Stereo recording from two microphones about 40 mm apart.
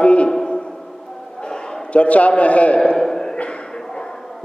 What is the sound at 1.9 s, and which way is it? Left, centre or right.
A man's voice, left.